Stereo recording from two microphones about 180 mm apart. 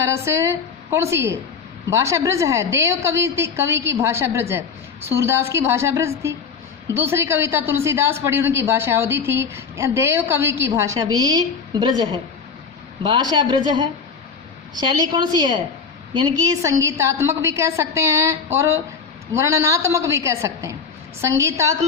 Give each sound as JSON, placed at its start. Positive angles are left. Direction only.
{"t": 0.1, "sound": "a woman's voice", "side_deg": -15}